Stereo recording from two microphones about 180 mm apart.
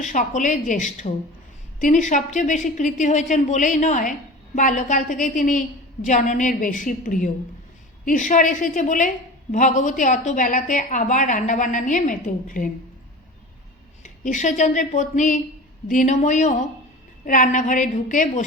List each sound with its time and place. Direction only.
0.0 s a woman's voice: 45° left (ahead or behind)
14.0 s a woman's voice: 45° left (ahead or behind)